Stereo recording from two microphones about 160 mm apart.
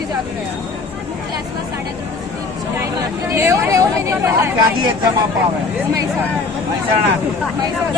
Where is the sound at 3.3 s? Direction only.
15° right (ahead or behind).